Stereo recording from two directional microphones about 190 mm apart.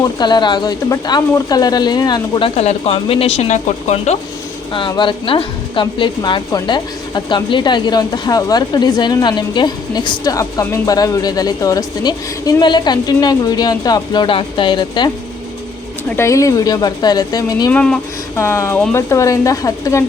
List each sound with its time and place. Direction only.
0.2 s a woman's voice: 25° left (ahead or behind)
2.6 s a woman's voice: 35° left (ahead or behind)
16.1 s a woman's voice: 15° left (ahead or behind)
17.7 s speech: 5° left (ahead or behind)